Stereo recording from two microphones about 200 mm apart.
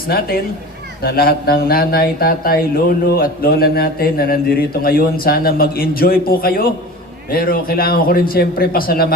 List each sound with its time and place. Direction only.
0.1 s a man's voice: 50° left (ahead or behind)